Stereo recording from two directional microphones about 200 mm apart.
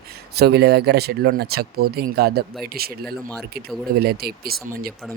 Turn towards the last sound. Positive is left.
turn(degrees=-50)  # may be behind; listen again after turning